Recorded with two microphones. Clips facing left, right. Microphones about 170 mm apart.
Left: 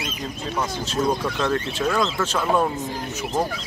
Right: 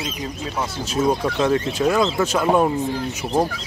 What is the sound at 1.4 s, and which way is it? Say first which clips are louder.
Speech: right 6 dB; 15° right (ahead or behind).